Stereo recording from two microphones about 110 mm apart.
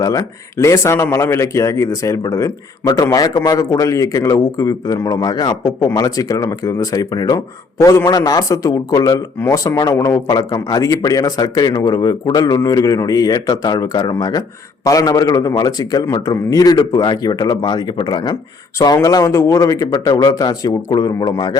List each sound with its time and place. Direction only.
0.0 s speech: 30° left (ahead or behind)
19.0 s speech: 30° left (ahead or behind)